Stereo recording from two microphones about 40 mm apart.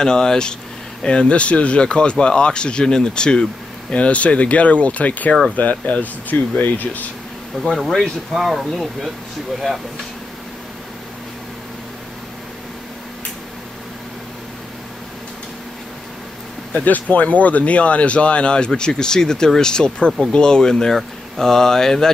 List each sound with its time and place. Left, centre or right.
0.0 s speech: centre
3.9 s speech: left
7.5 s speech: left
8.3 s speech: centre
16.8 s speech: left; by 22.1 s centre